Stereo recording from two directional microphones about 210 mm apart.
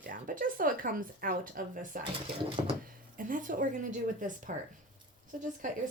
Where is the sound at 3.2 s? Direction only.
40° right (ahead or behind).